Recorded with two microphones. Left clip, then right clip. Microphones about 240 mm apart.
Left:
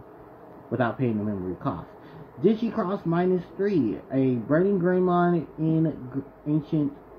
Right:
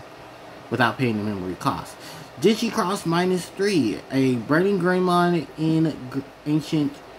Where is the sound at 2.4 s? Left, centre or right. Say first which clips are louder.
Right 4 dB; centre.